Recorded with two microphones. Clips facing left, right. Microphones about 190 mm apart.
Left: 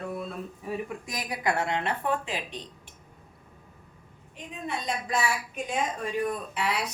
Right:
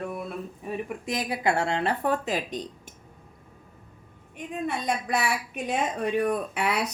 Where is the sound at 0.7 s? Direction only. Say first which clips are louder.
Right 3 dB; 25° right (ahead or behind); by 2.9 s 40° right (ahead or behind).